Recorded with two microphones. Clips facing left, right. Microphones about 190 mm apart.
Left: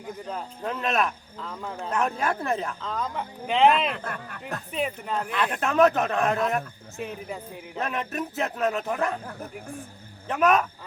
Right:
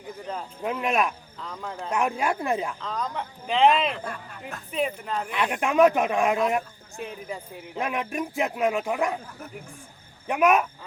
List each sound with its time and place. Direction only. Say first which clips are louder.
0.6 s a man's voice: right 1 dB; 10° right (ahead or behind)
1.5 s speech: even; centre (ahead or behind)
1.9 s a man's voice: right 1 dB; 10° right (ahead or behind)
2.8 s speech: even; centre (ahead or behind)
4.0 s speech: left 1 dB; 65° left (ahead or behind)
4.7 s speech: right 2 dB; centre (ahead or behind)
5.3 s a man's voice: right 2 dB; 15° right (ahead or behind)
6.9 s speech: left 1 dB; centre (ahead or behind)
7.8 s a man's voice: right 1 dB; 10° right (ahead or behind)
10.2 s a man's voice: right 1 dB; 10° right (ahead or behind)